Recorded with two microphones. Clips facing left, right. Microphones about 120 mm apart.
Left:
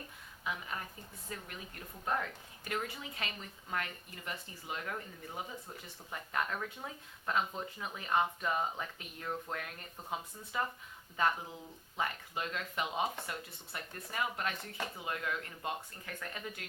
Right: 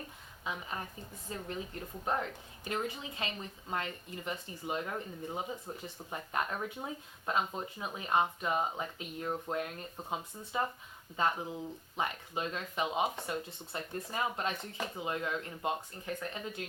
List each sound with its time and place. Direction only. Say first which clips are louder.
0.4 s speech: right 1 dB; 25° right (ahead or behind)
11.9 s speech: right 1 dB; 20° right (ahead or behind)